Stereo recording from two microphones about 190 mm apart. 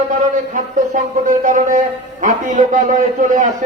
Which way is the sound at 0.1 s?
40° right (ahead or behind).